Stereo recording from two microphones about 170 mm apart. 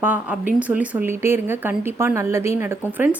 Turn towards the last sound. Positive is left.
turn(degrees=-10)  # may be behind; listen again after turning